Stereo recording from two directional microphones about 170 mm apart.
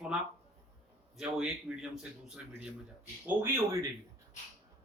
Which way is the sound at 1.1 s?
5° right (ahead or behind).